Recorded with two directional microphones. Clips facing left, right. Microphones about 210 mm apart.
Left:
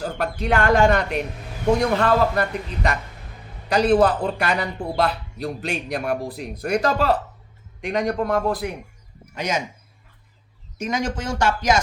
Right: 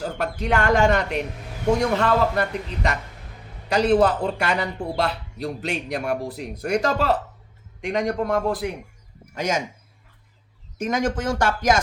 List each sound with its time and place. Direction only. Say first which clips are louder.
0.0 s a man's voice: left 1 dB; 20° right (ahead or behind)
9.3 s speech: right 1 dB; 45° right (ahead or behind)
10.8 s speech: right 2 dB; 50° right (ahead or behind)